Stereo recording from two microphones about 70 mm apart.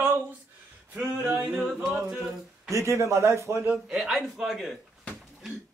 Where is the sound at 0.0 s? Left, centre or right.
Right.